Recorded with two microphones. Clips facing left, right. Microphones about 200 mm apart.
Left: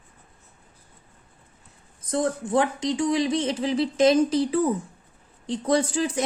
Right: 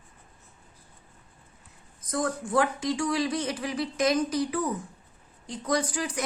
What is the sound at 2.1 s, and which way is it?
A woman's voice, 25° left (ahead or behind).